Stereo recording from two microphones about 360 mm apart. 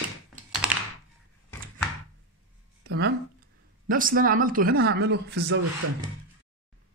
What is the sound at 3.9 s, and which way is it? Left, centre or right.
Speech, right.